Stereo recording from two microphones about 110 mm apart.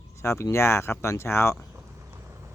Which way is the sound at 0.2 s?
25° left (ahead or behind).